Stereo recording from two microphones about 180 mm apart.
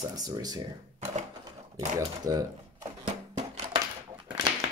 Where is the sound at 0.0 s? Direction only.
20° right (ahead or behind).